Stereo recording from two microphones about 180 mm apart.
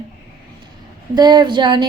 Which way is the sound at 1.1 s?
25° right (ahead or behind).